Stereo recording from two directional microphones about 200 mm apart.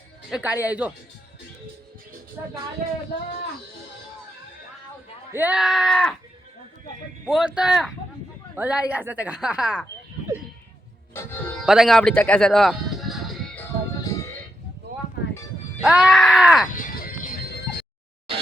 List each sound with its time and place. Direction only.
0.3 s a woman's voice: 5° right (ahead or behind)
2.4 s a woman's voice: 15° right (ahead or behind)
5.3 s speech: 10° right (ahead or behind)
7.3 s a woman's voice: 5° right (ahead or behind)
11.6 s music: centre (ahead or behind)
14.0 s a sound: 20° left (ahead or behind)
15.8 s speech: 5° right (ahead or behind)
16.7 s music: 45° left (ahead or behind)